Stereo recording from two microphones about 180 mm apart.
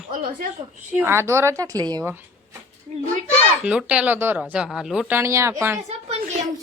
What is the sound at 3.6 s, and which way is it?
A woman's voice, 5° right (ahead or behind).